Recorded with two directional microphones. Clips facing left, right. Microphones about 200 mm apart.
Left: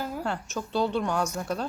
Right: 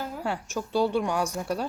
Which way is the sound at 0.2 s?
10° right (ahead or behind).